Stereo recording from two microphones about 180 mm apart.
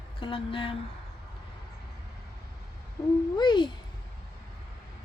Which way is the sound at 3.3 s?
25° left (ahead or behind).